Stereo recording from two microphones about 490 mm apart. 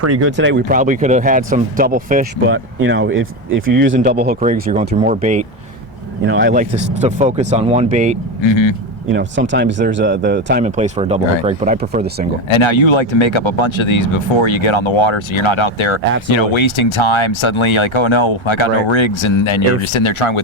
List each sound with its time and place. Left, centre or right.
0.0 s speech: right
8.4 s a man's voice: left
9.0 s speech: right
12.5 s speech: left